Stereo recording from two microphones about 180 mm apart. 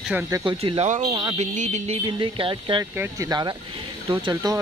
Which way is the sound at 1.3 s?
40° right (ahead or behind).